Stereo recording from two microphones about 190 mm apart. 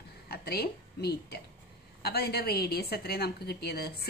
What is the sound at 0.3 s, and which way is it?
A woman's voice, 55° left (ahead or behind).